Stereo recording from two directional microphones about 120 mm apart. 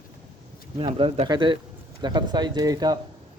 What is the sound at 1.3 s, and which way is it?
Speech, 40° right (ahead or behind).